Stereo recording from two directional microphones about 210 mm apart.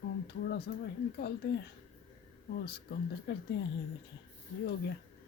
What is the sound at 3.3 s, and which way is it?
Speech, 50° left (ahead or behind).